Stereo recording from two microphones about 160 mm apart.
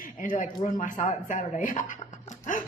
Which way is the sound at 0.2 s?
55° left (ahead or behind).